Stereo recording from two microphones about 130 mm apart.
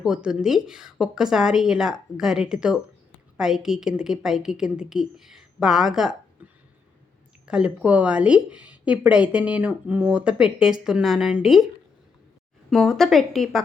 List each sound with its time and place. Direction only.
0.0 s a woman's voice: 5° right (ahead or behind)
7.4 s speech: 5° right (ahead or behind)
12.7 s a woman's voice: centre (ahead or behind)